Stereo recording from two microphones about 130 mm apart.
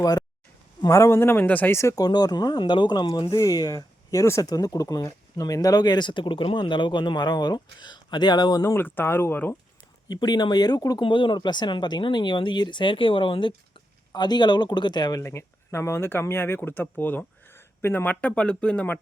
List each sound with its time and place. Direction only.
0.8 s speech: 25° left (ahead or behind)
8.6 s speech: 15° left (ahead or behind)
10.1 s speech: 30° left (ahead or behind); by 18.9 s 10° left (ahead or behind)